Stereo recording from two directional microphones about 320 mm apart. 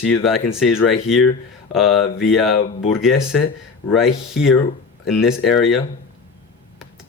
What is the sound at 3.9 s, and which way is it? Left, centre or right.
Speech, centre.